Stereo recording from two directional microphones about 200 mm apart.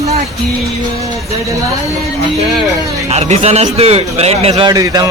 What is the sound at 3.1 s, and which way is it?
Speech, 35° right (ahead or behind).